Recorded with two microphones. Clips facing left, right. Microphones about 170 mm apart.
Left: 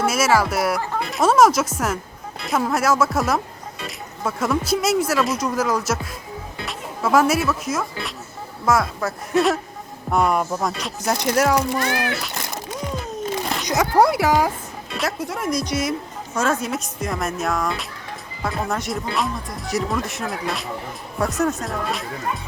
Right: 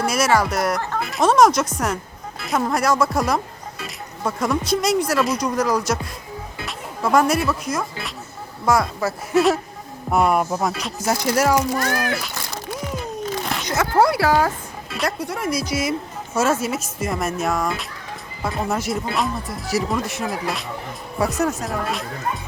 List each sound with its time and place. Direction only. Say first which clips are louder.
0.0 s speech: even; 5° left (ahead or behind)
11.9 s speech: even; 45° right (ahead or behind)
14.0 s speech: right 1 dB; 20° left (ahead or behind)
14.9 s speech: right 1 dB; centre (ahead or behind)